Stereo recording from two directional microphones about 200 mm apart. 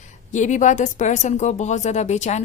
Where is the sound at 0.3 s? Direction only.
35° left (ahead or behind).